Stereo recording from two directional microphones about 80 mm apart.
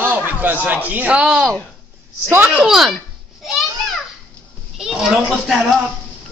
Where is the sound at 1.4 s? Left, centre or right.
Centre.